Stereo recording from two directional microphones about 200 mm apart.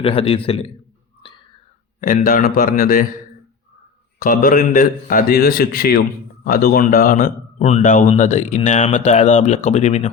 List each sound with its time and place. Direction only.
0.0 s a man's voice: 30° left (ahead or behind)
2.0 s a man's voice: 45° left (ahead or behind)
4.2 s a man's voice: 45° left (ahead or behind)